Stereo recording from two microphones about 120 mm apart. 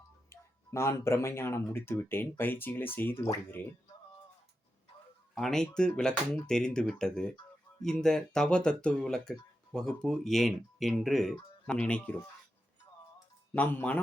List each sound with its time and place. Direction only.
0.3 s speech: 25° left (ahead or behind)
5.3 s speech: 5° left (ahead or behind)
13.5 s speech: 15° left (ahead or behind)